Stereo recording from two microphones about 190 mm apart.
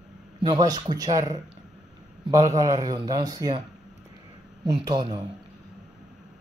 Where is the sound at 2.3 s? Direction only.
15° right (ahead or behind).